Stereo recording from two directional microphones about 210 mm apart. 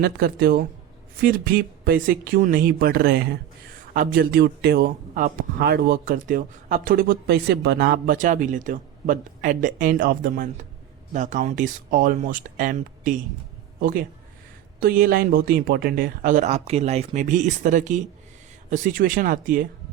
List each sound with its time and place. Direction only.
0.0 s speech: 45° right (ahead or behind)
14.8 s speech: 45° right (ahead or behind)